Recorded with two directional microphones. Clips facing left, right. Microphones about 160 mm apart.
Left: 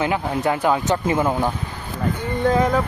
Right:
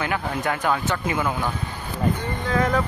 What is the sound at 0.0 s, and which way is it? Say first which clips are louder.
Speech: left 4 dB; 20° left (ahead or behind).